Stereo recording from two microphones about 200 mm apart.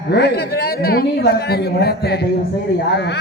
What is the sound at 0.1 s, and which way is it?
A man's voice, 55° left (ahead or behind).